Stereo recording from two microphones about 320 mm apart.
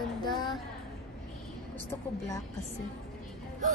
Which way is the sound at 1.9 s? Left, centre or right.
Centre.